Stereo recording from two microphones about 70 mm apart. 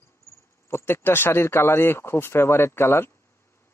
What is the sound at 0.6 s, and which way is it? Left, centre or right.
A man's voice, left.